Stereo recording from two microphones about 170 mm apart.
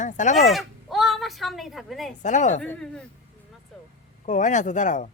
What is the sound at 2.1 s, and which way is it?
Speech, 45° left (ahead or behind).